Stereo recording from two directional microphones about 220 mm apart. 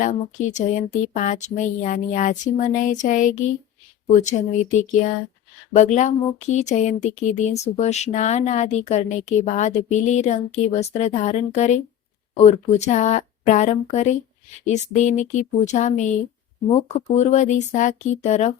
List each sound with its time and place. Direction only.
0.0 s speech: 35° left (ahead or behind)